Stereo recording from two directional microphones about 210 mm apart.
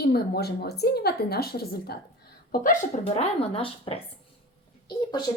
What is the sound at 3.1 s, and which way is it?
Speech, 30° left (ahead or behind).